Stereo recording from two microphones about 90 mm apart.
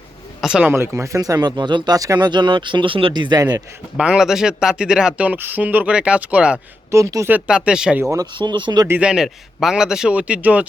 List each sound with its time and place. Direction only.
0.6 s speech: 25° right (ahead or behind); by 3.4 s 55° right (ahead or behind)
3.9 s speech: 10° right (ahead or behind)
6.9 s a woman's voice: 35° right (ahead or behind)
7.4 s speech: 10° right (ahead or behind)
8.4 s speech: 60° right (ahead or behind)
9.0 s speech: 10° right (ahead or behind)